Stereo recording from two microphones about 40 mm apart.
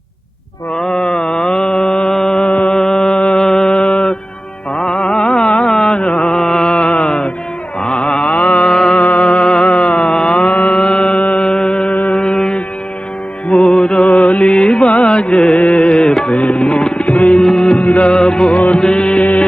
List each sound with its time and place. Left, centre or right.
0.8 s mantra: left
2.5 s music: left
2.7 s music: left
3.4 s mantra: centre
4.8 s music: left
6.3 s mantra: centre; by 8.7 s left
8.7 s music: centre
9.0 s mantra: left
11.4 s music: left
16.2 s tabla: left
17.4 s music: left
17.8 s music: left
18.1 s music: left